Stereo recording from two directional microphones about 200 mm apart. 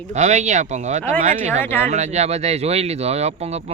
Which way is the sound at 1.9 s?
35° right (ahead or behind).